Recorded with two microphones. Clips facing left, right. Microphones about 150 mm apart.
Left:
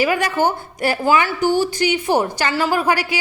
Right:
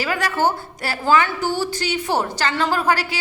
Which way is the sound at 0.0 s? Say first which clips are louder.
Left 3 dB; 15° left (ahead or behind).